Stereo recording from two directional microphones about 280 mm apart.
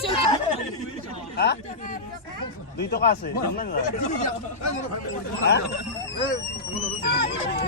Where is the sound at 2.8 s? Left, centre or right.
Left.